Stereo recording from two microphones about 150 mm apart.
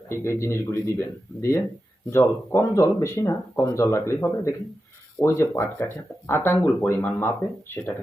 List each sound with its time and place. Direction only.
0.1 s speech: 15° left (ahead or behind)